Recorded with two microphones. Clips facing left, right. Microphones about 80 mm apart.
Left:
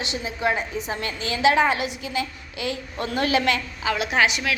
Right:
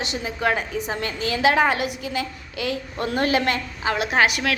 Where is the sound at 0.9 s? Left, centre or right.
Right.